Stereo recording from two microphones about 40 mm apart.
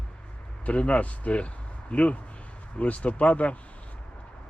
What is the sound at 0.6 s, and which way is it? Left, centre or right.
Speech, left.